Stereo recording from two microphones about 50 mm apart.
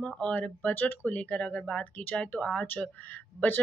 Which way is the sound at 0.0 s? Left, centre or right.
Left.